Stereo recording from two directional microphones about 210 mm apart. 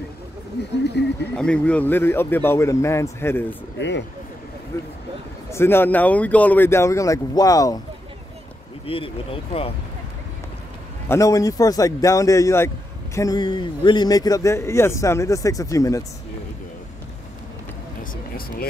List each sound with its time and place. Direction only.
0.6 s speech: 50° left (ahead or behind)
1.3 s a man's voice: 5° left (ahead or behind)
5.5 s a man's voice: 10° left (ahead or behind)
8.8 s speech: 25° left (ahead or behind)
11.1 s a man's voice: 15° left (ahead or behind)
18.1 s vehicle: 45° left (ahead or behind)